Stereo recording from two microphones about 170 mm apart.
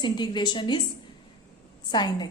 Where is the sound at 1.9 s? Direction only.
25° left (ahead or behind).